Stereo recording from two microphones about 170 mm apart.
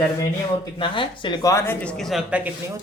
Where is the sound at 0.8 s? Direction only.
30° left (ahead or behind); by 2.5 s 5° right (ahead or behind).